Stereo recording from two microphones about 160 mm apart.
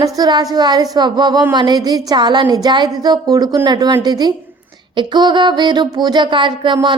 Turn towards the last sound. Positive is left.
turn(degrees=-30)  # may be behind; listen again after turning